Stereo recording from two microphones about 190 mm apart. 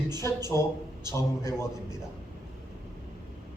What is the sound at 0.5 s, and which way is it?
Speech, 15° left (ahead or behind).